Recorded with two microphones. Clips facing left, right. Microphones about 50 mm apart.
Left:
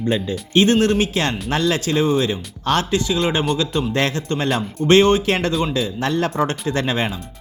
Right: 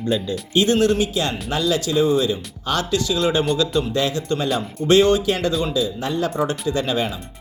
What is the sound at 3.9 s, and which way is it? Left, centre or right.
Speech, left.